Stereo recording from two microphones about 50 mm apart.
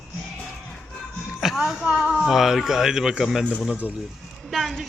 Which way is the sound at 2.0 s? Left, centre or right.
Centre.